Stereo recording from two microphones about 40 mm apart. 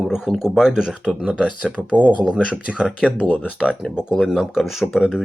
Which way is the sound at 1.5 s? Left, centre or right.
Right.